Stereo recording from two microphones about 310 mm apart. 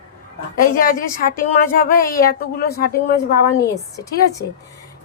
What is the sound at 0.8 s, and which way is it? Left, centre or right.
A woman's voice, left.